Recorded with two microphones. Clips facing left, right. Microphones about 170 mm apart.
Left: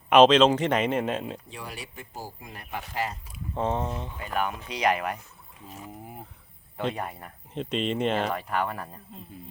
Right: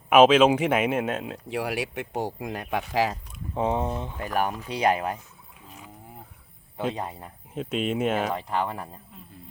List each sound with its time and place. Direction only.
0.1 s speech: 5° right (ahead or behind)
1.5 s speech: 70° right (ahead or behind); by 3.2 s 90° right
3.5 s speech: 15° right (ahead or behind)
4.2 s speech: 40° right (ahead or behind)
5.7 s a sound: 5° left (ahead or behind)
6.9 s speech: 20° right (ahead or behind)
7.5 s speech: 5° right (ahead or behind)
8.4 s speech: 20° right (ahead or behind)